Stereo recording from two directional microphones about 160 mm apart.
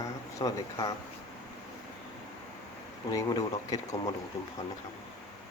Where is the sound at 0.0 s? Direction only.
20° left (ahead or behind).